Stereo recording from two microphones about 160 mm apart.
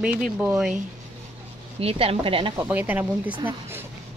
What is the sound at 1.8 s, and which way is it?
Speech, 35° right (ahead or behind).